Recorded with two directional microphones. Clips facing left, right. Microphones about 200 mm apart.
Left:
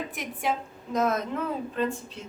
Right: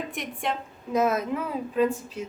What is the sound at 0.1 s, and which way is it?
Speech, centre (ahead or behind).